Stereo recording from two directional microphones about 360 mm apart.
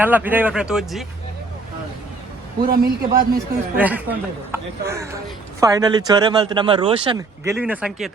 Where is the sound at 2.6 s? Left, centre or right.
Right.